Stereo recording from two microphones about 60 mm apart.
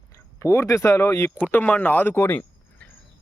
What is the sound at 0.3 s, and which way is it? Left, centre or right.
Speech, left.